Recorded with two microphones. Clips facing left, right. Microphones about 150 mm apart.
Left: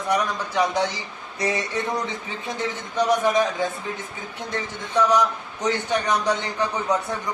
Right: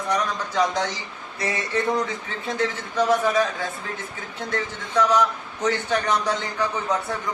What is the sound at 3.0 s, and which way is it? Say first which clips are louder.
Speech: left 1 dB; 15° left (ahead or behind).